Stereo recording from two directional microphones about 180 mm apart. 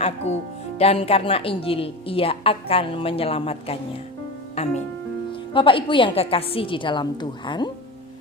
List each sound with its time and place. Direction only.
0.8 s a woman's voice: 35° left (ahead or behind)